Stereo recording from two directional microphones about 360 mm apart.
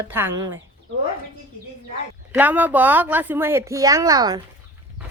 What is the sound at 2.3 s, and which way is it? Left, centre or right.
Speech, centre.